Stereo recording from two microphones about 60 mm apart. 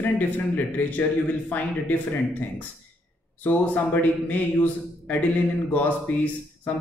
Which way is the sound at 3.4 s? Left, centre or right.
Left.